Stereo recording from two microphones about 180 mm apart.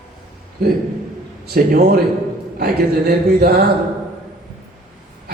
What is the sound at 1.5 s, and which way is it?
Speech, 55° right (ahead or behind).